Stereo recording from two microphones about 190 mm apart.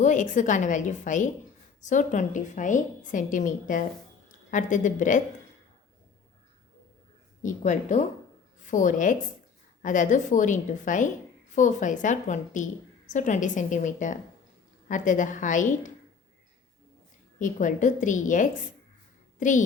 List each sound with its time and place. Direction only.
0.0 s a woman's voice: 40° left (ahead or behind)
7.4 s a woman's voice: 40° left (ahead or behind)
17.4 s a woman's voice: 40° left (ahead or behind)